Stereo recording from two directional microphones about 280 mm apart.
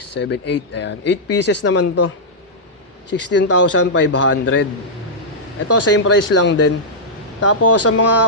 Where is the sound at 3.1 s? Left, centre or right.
Left.